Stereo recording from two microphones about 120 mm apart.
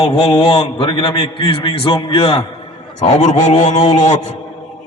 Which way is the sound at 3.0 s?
85° left.